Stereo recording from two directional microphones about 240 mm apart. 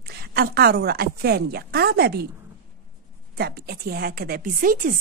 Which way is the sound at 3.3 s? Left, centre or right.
Right.